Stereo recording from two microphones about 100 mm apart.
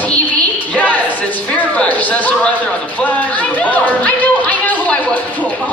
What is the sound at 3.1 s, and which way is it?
Music, 15° left (ahead or behind).